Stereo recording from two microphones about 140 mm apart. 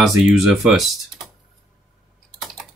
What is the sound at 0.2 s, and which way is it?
Speech, 5° right (ahead or behind).